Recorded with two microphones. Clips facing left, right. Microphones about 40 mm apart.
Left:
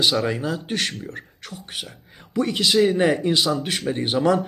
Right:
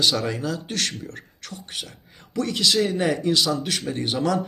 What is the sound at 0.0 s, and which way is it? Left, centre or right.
Speech, centre.